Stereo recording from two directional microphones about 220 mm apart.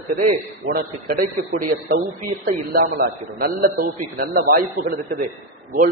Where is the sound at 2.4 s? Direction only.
40° right (ahead or behind).